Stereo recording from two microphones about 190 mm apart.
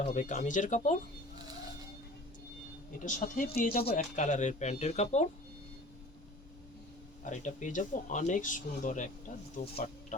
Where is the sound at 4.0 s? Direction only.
40° left (ahead or behind).